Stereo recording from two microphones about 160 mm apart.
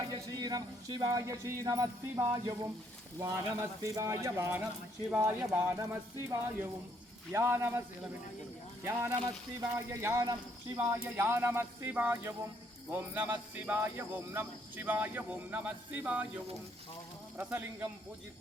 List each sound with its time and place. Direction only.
0.0 s speech: 25° right (ahead or behind)
8.9 s speech: 15° right (ahead or behind)
17.3 s speech: 10° right (ahead or behind)